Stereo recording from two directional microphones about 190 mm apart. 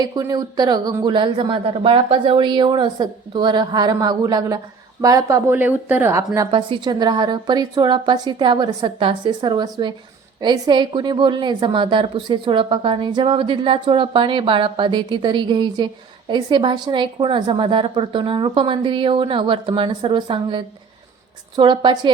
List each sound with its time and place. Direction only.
0.0 s speech: 20° right (ahead or behind)